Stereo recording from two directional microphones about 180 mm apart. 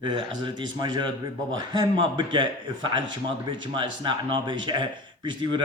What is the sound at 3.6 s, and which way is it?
A man's voice, 25° right (ahead or behind).